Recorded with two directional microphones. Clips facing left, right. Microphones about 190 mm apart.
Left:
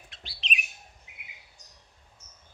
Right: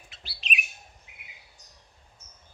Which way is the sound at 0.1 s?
5° right (ahead or behind).